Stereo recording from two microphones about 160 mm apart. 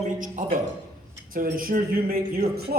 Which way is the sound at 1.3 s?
60° right (ahead or behind).